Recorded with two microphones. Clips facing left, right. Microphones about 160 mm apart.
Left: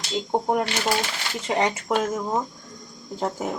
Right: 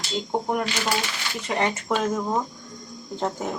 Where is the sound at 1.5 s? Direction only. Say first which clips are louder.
Left 2 dB; 20° left (ahead or behind).